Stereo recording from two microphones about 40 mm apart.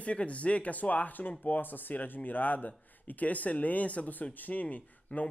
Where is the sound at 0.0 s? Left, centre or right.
Left.